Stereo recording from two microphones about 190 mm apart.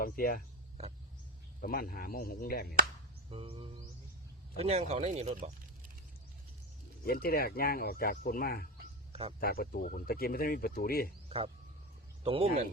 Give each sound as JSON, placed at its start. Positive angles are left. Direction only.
{"t": 0.0, "sound": "speech", "side_deg": 50}
{"t": 1.6, "sound": "speech", "side_deg": 50}
{"t": 3.2, "sound": "speech", "side_deg": -30}
{"t": 7.0, "sound": "speech", "side_deg": 55}
{"t": 11.3, "sound": "speech", "side_deg": -30}